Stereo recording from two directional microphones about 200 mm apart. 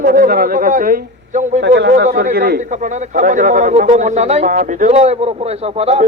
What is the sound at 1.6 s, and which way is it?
Speech, 60° right (ahead or behind).